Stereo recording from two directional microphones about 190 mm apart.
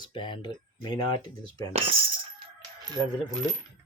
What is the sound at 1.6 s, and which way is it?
Speech, 30° right (ahead or behind).